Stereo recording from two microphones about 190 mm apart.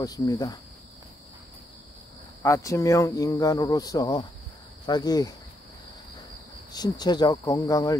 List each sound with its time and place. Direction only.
0.0 s speech: 20° left (ahead or behind)
2.4 s speech: 15° left (ahead or behind)
6.7 s speech: 20° left (ahead or behind)